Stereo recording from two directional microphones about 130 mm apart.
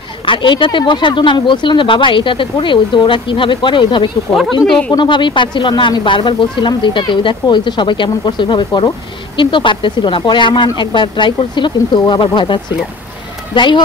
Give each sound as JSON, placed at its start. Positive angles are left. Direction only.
{"t": 0.2, "sound": "speech", "side_deg": 40}
{"t": 4.4, "sound": "speech", "side_deg": 5}
{"t": 4.9, "sound": "speech", "side_deg": 40}